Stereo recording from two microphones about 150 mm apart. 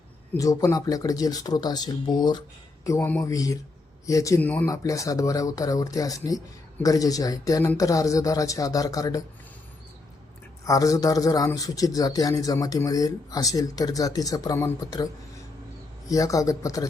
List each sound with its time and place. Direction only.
0.3 s speech: 25° left (ahead or behind)
4.7 s speech: 20° left (ahead or behind)
10.6 s speech: 25° left (ahead or behind)